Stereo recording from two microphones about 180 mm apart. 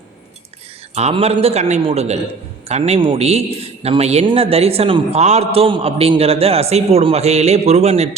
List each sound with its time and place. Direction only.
0.9 s a man's voice: 35° right (ahead or behind)